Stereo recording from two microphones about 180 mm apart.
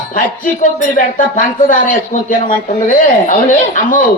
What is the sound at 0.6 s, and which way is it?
Speech, 50° left (ahead or behind).